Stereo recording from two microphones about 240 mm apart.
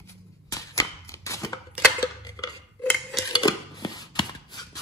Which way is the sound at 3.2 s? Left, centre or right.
Centre.